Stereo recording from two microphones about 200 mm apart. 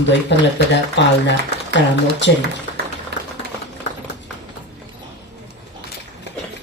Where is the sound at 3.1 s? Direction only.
55° right (ahead or behind).